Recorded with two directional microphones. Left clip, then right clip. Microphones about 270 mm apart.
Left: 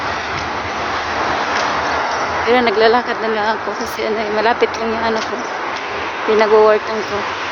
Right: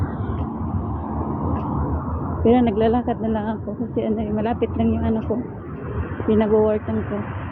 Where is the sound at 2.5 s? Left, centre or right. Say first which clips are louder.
Left 5 dB; centre.